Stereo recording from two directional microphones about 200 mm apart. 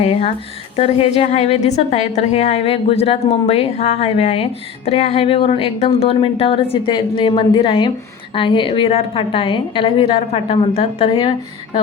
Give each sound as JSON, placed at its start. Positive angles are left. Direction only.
{"t": 0.0, "sound": "a woman's voice", "side_deg": 30}